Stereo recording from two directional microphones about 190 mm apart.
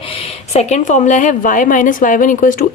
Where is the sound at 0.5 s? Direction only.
40° left (ahead or behind).